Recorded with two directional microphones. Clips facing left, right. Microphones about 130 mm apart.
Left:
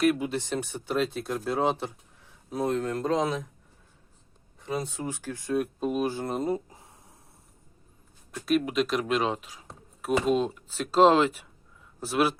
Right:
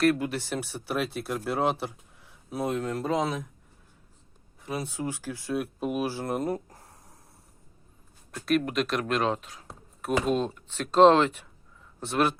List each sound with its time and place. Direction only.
0.3 s speech: 20° left (ahead or behind)
0.5 s speech: 10° right (ahead or behind)
4.6 s speech: 5° right (ahead or behind)
8.4 s speech: centre (ahead or behind)